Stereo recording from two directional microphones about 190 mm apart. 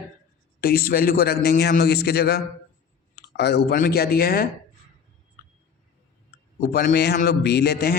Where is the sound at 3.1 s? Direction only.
60° left (ahead or behind).